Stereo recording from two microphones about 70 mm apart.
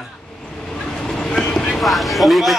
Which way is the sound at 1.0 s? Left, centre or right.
Centre.